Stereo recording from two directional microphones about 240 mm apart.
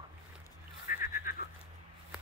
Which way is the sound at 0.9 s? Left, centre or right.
Left.